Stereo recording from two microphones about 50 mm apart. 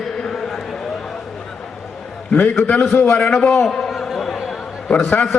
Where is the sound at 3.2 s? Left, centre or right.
Centre.